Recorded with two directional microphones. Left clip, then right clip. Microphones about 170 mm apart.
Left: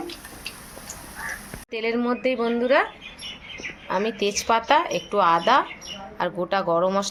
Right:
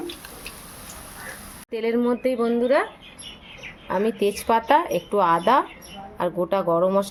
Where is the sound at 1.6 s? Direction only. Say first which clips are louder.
Right 2 dB; 45° right (ahead or behind).